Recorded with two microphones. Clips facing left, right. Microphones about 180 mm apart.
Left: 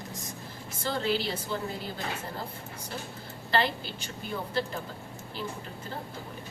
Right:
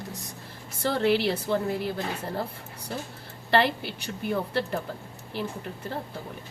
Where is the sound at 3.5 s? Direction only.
65° right (ahead or behind).